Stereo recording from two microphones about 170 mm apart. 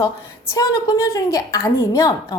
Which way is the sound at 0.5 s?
20° left (ahead or behind).